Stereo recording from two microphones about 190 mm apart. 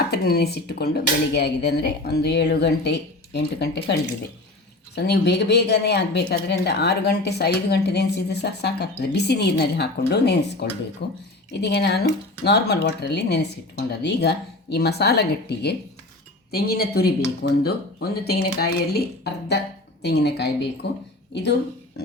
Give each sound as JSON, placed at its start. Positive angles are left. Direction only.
{"t": 0.1, "sound": "speech", "side_deg": 55}
{"t": 4.9, "sound": "speech", "side_deg": 60}